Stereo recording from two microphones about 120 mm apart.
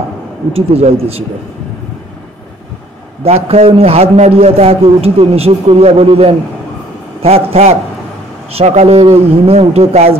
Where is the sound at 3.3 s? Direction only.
60° right (ahead or behind).